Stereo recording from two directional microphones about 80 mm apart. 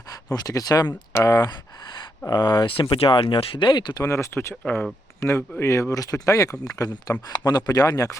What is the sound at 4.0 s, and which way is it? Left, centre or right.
Speech, left.